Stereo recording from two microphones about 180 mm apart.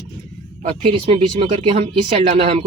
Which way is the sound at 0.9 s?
30° right (ahead or behind).